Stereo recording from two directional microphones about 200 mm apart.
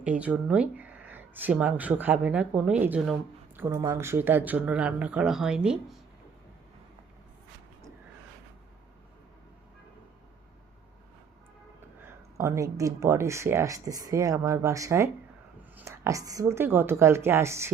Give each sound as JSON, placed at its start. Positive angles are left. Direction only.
{"t": 0.0, "sound": "speech", "side_deg": -5}
{"t": 12.4, "sound": "speech", "side_deg": -15}